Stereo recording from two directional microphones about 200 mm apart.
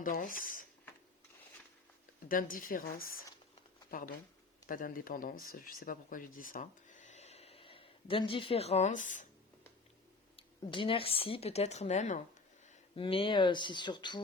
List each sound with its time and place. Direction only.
0.0 s speech: 45° left (ahead or behind)
2.3 s speech: 45° left (ahead or behind)
4.6 s speech: 45° left (ahead or behind)
10.3 s a woman's voice: 25° left (ahead or behind)